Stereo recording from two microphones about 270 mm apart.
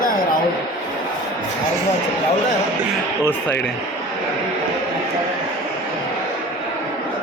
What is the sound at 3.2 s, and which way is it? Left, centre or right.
Speech, centre.